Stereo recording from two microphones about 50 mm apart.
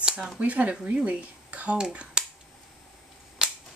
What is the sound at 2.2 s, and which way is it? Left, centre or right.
Scissors, centre.